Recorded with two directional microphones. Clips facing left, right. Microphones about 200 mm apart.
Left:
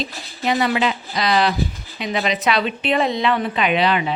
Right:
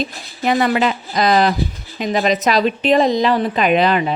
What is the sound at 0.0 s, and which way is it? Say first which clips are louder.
A woman's voice: right 4 dB; 50° right (ahead or behind).